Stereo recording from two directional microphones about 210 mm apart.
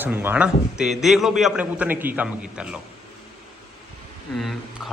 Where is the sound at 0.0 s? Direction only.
10° right (ahead or behind).